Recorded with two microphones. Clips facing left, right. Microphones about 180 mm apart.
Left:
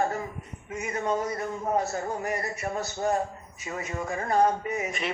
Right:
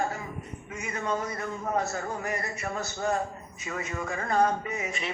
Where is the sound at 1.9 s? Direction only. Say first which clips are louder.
Left 2 dB; 35° left (ahead or behind).